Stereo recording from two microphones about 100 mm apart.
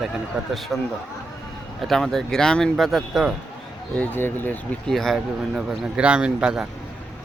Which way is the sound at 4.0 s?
20° left (ahead or behind).